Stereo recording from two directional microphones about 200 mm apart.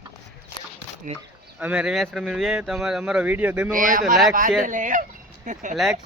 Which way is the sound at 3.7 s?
40° right (ahead or behind).